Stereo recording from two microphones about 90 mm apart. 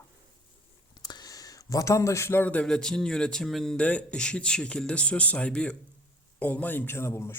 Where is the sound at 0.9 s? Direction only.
50° left (ahead or behind).